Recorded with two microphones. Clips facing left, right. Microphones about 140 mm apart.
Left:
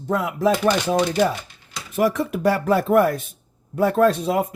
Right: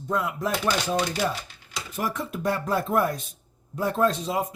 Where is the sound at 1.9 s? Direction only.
90° left.